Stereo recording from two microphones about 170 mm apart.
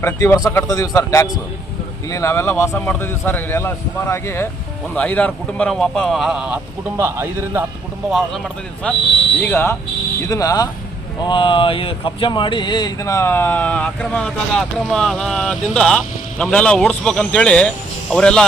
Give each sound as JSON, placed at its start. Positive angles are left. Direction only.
{"t": 0.0, "sound": "a man's voice", "side_deg": 15}
{"t": 8.8, "sound": "a man's voice", "side_deg": 5}